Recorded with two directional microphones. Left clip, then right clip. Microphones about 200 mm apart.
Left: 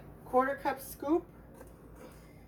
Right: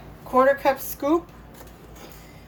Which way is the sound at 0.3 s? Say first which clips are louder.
Right 11 dB; 30° right (ahead or behind).